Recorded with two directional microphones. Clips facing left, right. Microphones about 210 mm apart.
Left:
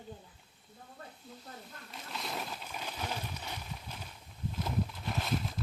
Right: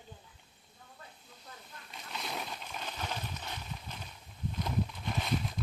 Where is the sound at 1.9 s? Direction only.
Centre (ahead or behind).